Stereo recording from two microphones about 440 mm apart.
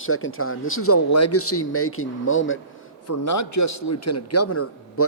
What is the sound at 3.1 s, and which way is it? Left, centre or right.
A man's voice, left.